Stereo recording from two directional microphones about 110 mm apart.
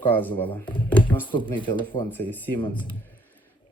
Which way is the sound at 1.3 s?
45° left (ahead or behind).